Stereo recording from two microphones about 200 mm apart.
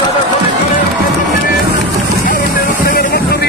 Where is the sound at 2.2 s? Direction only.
45° left (ahead or behind).